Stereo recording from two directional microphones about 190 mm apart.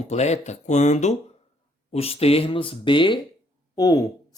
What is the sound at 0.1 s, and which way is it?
Speech, 35° left (ahead or behind).